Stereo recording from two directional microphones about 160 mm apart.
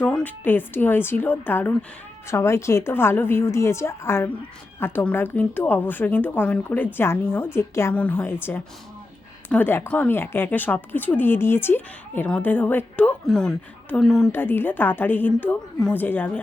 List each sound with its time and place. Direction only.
0.0 s speech: 10° left (ahead or behind)
14.3 s speech: 15° left (ahead or behind)